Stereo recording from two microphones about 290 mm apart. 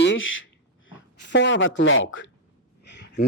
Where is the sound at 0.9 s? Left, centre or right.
Left.